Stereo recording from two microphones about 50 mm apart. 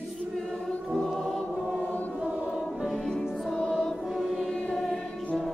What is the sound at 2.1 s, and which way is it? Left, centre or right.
Choir, right.